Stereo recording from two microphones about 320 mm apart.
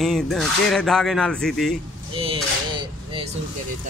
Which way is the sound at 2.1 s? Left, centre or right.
Centre.